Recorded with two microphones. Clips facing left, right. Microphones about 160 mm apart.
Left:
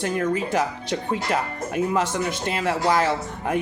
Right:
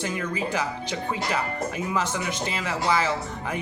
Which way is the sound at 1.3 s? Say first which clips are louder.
Left 2 dB; 45° left (ahead or behind).